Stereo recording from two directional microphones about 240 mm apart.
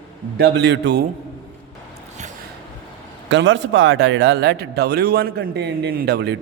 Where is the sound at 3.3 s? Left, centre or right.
Right.